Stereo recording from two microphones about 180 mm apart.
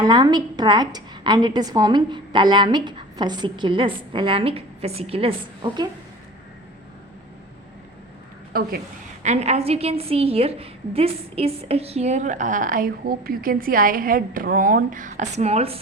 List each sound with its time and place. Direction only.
0.0 s a woman's voice: 20° right (ahead or behind)
9.2 s a woman's voice: 40° right (ahead or behind)